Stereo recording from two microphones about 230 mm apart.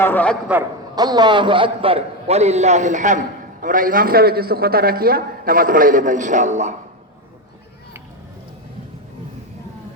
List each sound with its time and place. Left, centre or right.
0.0 s a man's voice: centre
0.9 s a man's voice: centre